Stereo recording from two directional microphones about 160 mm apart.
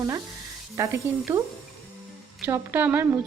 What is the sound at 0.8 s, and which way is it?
Speech, 20° right (ahead or behind).